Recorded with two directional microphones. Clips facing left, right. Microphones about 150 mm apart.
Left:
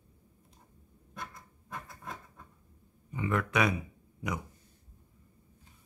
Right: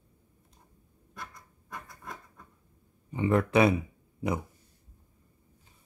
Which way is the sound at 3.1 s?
30° right (ahead or behind).